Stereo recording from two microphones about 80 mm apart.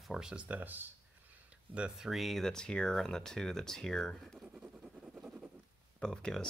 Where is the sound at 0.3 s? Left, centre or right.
Centre.